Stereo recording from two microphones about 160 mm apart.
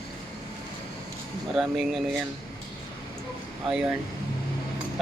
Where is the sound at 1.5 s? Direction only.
Centre (ahead or behind).